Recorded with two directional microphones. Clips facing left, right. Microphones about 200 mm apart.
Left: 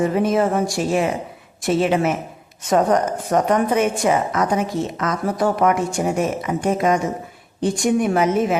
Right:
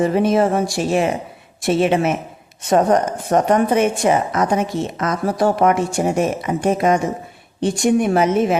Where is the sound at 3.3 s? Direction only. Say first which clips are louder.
Right 3 dB; 30° right (ahead or behind).